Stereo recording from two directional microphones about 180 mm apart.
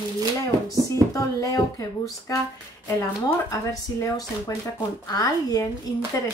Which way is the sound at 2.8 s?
15° left (ahead or behind).